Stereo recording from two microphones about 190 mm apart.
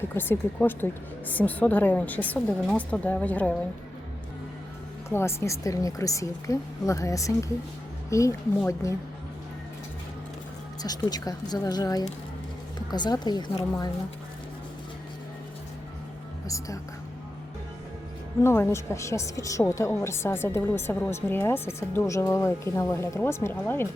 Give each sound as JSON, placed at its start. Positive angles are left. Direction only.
{"t": 0.1, "sound": "a woman's voice", "side_deg": 10}
{"t": 5.0, "sound": "a woman's voice", "side_deg": 15}
{"t": 10.8, "sound": "speech", "side_deg": 20}
{"t": 16.5, "sound": "a woman's voice", "side_deg": 15}
{"t": 18.4, "sound": "a woman's voice", "side_deg": 15}